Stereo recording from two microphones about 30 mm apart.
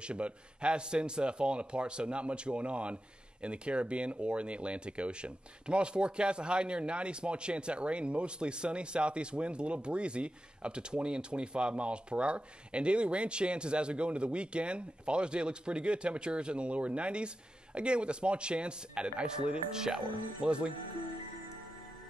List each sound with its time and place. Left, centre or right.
0.0 s speech: right
19.7 s speech: right
20.4 s speech: right